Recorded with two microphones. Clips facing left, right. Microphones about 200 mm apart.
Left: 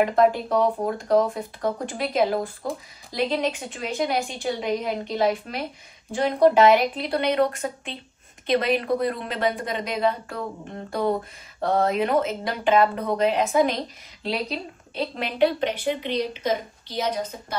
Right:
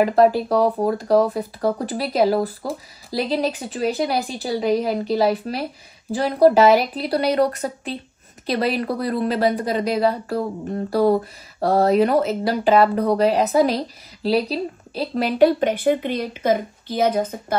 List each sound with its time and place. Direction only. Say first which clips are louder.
0.0 s a woman's voice: right 4 dB; 35° right (ahead or behind); by 17.6 s 50° right (ahead or behind)